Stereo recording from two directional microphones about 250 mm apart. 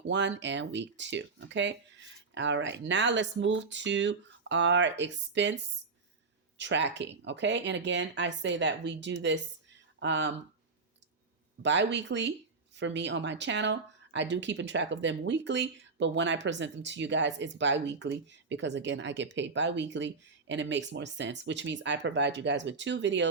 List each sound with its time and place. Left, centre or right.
0.1 s speech: right
6.6 s speech: right
11.6 s speech: right